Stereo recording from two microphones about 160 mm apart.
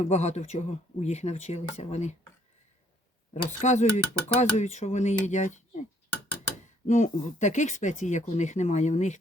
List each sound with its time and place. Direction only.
0.0 s speech: 45° left (ahead or behind)
3.3 s speech: 45° left (ahead or behind)
6.8 s speech: 50° left (ahead or behind)